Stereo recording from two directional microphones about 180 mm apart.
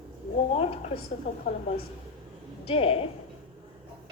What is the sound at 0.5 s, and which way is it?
A woman's voice, 35° left (ahead or behind).